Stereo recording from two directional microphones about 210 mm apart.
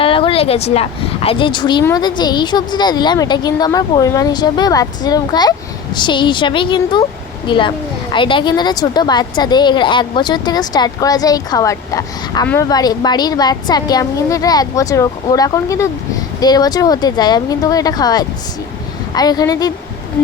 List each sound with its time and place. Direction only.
0.0 s a woman's voice: 25° left (ahead or behind)